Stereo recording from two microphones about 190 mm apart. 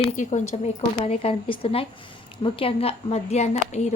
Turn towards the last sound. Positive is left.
turn(degrees=35)  # may be behind; listen again after turning